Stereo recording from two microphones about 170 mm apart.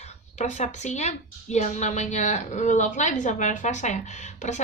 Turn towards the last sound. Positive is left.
turn(degrees=45)  # may be behind; listen again after turning